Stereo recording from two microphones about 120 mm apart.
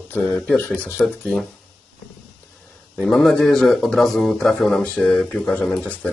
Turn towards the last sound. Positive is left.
turn(degrees=10)  # may be behind; listen again after turning